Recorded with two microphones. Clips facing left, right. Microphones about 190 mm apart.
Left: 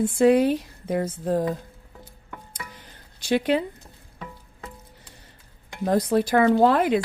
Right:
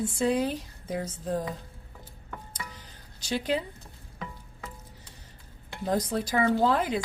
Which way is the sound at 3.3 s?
60° left (ahead or behind).